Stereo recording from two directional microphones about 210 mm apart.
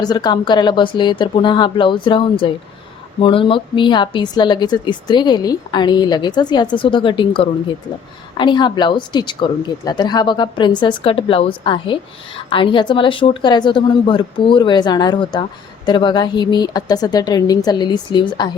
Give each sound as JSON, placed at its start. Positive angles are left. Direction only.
{"t": 0.0, "sound": "a woman's voice", "side_deg": 20}